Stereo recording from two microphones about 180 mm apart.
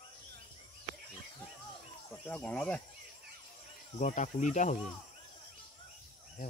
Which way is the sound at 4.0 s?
40° left (ahead or behind).